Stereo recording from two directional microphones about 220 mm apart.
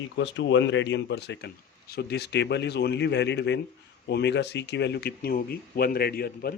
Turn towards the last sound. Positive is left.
turn(degrees=45)  # may be behind; listen again after turning